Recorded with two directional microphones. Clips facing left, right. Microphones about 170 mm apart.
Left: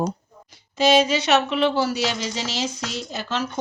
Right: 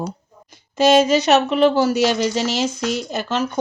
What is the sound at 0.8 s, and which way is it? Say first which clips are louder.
Speech: right 4 dB; 45° right (ahead or behind).